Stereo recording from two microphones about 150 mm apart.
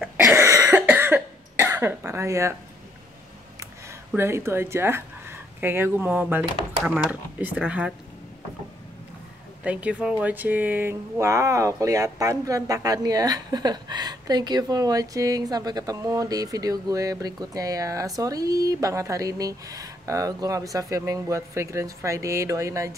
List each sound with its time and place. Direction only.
0.2 s cough: 15° right (ahead or behind)
4.1 s a woman's voice: 15° right (ahead or behind)
9.6 s speech: 10° right (ahead or behind)